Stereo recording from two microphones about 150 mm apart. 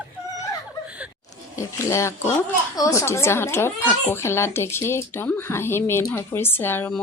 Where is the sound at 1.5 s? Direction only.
20° left (ahead or behind).